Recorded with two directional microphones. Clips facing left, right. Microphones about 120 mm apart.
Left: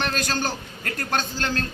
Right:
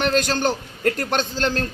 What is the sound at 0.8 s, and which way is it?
Speech, 35° right (ahead or behind).